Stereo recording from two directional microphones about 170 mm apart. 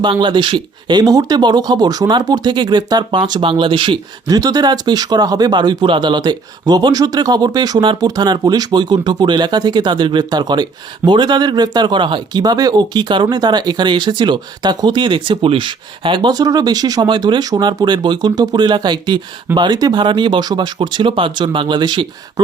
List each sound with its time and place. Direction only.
0.0 s speech: 25° right (ahead or behind)